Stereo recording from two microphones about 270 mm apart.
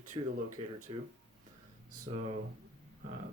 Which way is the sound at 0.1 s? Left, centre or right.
Centre.